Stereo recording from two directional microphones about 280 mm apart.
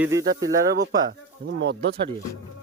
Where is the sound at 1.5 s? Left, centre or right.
Right.